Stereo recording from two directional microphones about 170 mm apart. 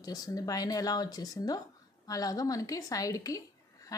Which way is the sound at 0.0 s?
20° left (ahead or behind).